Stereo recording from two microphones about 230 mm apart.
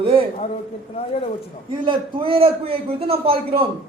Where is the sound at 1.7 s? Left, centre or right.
Right.